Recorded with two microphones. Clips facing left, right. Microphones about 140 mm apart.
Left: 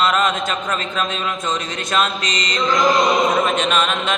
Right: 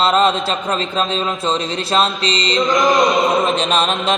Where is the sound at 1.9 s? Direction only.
30° right (ahead or behind).